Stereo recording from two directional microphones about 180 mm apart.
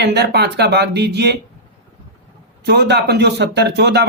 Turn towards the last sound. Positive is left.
turn(degrees=-70)  # may be behind; listen again after turning